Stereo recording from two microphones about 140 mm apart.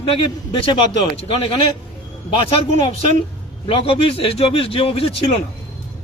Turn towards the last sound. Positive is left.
turn(degrees=45)  # may be behind; listen again after turning